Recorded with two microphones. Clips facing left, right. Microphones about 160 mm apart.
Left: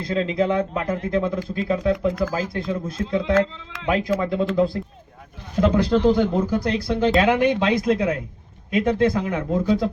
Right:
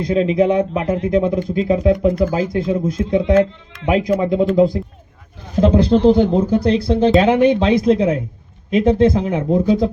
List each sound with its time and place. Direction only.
0.0 s speech: 20° right (ahead or behind)